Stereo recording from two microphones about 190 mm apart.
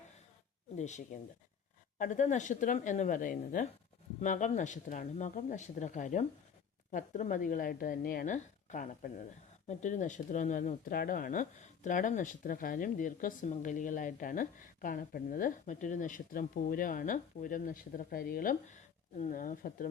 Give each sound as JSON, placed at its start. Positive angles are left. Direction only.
{"t": 0.8, "sound": "speech", "side_deg": 40}